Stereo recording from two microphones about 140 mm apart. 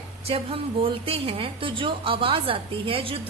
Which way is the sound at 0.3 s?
45° right (ahead or behind).